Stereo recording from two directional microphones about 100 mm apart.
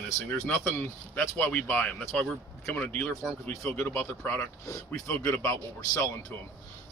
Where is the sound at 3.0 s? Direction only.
Centre (ahead or behind).